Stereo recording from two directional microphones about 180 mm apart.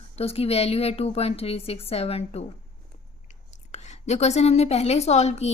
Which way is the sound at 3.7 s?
40° left (ahead or behind).